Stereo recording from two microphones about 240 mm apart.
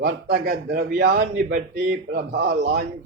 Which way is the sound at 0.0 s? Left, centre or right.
Right.